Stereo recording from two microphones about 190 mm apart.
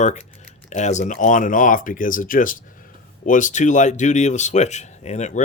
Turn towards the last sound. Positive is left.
turn(degrees=40)  # may be behind; listen again after turning